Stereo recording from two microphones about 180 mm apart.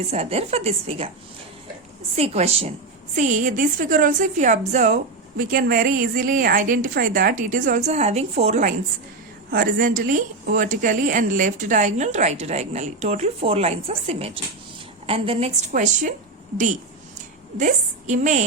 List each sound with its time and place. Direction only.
0.1 s a woman's voice: 35° right (ahead or behind)
2.1 s a woman's voice: 35° right (ahead or behind)
5.4 s a woman's voice: 50° right (ahead or behind)
9.5 s a woman's voice: 55° right (ahead or behind); by 15.5 s 35° right (ahead or behind)
15.7 s a woman's voice: 45° right (ahead or behind)
17.6 s a woman's voice: 45° right (ahead or behind)